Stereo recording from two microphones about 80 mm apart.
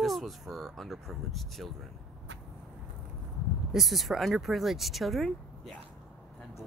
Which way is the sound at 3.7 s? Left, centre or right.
Centre.